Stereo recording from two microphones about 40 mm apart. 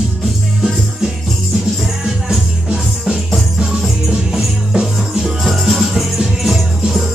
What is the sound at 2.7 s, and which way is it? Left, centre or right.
Music, centre.